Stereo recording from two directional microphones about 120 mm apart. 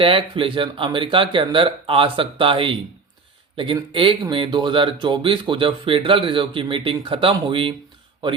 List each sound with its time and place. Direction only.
0.0 s speech: 50° right (ahead or behind)
3.9 s speech: 45° right (ahead or behind)